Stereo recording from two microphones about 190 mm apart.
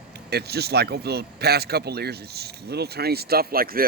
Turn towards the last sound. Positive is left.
turn(degrees=-50)  # may be behind; listen again after turning